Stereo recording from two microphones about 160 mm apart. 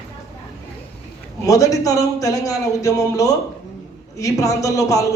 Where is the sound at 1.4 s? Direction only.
20° left (ahead or behind).